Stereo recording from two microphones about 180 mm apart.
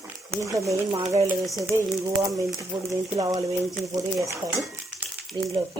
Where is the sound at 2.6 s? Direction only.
20° right (ahead or behind).